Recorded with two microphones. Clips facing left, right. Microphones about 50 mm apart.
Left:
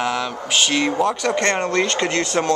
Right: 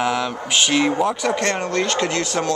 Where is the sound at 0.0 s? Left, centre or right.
Centre.